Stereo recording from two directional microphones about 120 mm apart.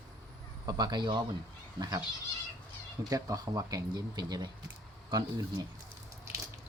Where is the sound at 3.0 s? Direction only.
30° right (ahead or behind).